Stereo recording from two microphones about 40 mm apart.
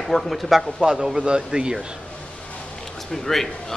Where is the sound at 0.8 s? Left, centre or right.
Centre.